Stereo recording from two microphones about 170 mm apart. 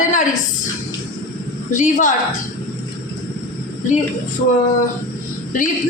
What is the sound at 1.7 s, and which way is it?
Speech, 50° left (ahead or behind).